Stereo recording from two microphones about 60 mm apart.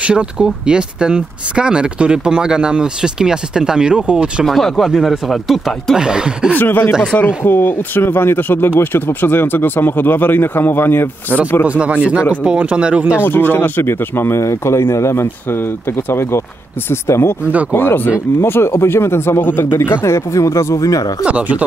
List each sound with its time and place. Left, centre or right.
0.0 s speech: centre
4.5 s speech: centre
5.9 s speech: centre
6.5 s speech: left
11.6 s speech: right
13.2 s speech: left
17.7 s speech: left
18.4 s speech: left
20.3 s speech: left
21.2 s speech: right